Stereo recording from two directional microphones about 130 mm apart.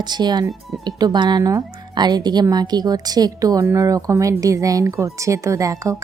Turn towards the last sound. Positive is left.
turn(degrees=-25)  # may be behind; listen again after turning